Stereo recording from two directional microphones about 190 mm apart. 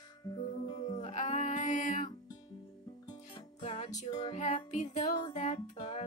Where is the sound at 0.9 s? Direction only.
35° left (ahead or behind).